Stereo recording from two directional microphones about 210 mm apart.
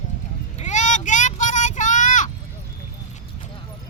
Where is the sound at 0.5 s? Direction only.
35° left (ahead or behind).